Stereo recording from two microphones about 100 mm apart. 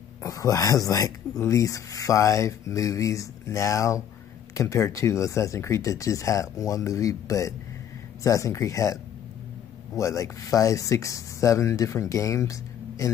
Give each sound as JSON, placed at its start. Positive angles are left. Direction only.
{"t": 0.2, "sound": "speech", "side_deg": 35}